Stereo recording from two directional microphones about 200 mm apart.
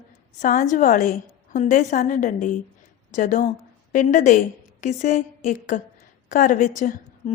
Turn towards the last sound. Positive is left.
turn(degrees=40)  # may be behind; listen again after turning